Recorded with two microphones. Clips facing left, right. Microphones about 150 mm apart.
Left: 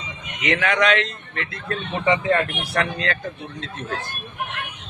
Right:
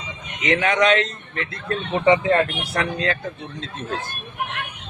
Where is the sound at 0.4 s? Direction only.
25° right (ahead or behind).